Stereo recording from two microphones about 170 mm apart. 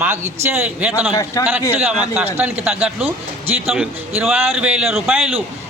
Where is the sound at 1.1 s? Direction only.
20° left (ahead or behind).